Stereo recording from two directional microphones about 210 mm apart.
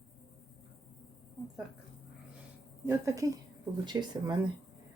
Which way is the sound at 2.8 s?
15° right (ahead or behind).